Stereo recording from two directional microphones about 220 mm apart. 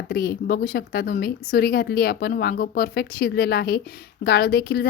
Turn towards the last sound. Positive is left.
turn(degrees=45)  # may be behind; listen again after turning